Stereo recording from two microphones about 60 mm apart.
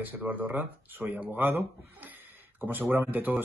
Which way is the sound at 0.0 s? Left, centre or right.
Right.